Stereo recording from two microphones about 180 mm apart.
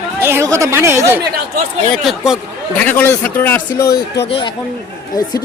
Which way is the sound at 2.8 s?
10° left (ahead or behind).